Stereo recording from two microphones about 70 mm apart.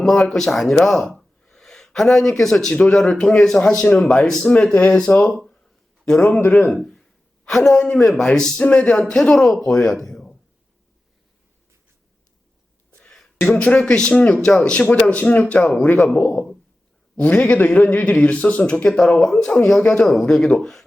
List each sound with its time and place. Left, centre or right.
0.3 s speech: centre
13.0 s speech: centre
15.6 s speech: centre
17.2 s speech: centre